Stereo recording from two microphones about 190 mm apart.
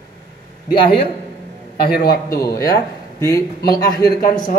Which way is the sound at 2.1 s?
20° left (ahead or behind).